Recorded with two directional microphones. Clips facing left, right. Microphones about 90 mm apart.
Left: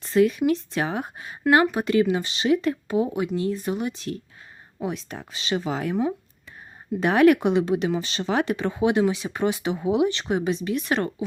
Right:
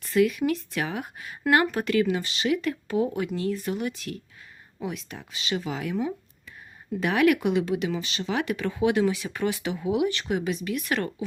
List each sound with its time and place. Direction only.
0.0 s speech: 30° left (ahead or behind)
7.0 s speech: 35° left (ahead or behind)